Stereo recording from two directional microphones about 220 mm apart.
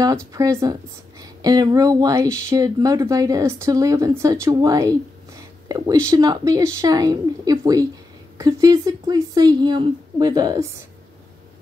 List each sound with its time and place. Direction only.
0.0 s speech: 15° right (ahead or behind)
6.0 s speech: 15° right (ahead or behind)